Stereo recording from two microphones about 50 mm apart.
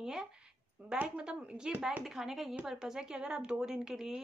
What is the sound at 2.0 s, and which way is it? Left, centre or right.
A woman's voice, centre.